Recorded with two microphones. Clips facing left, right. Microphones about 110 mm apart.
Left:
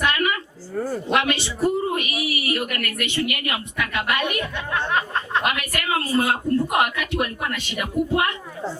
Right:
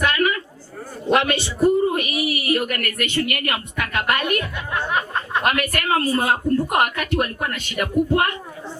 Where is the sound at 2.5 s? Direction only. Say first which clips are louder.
Right 4 dB; 45° right (ahead or behind).